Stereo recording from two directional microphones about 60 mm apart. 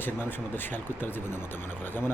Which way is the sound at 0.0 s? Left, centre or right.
Left.